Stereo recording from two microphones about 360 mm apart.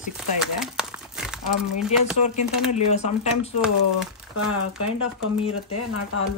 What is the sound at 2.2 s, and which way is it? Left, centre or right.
Speech, centre.